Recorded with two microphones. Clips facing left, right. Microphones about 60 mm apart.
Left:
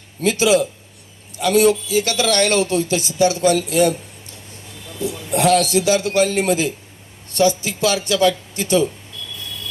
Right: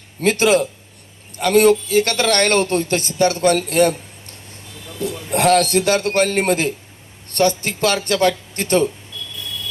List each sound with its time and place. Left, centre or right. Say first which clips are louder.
0.2 s speech: right 1 dB; right